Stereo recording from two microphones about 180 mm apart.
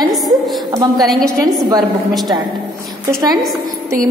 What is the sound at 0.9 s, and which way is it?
Speech, centre (ahead or behind).